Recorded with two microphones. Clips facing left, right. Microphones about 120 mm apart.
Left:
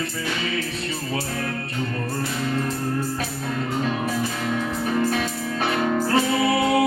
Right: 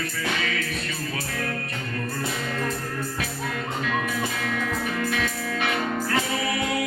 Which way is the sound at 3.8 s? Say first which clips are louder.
Left 2 dB; 30° left (ahead or behind).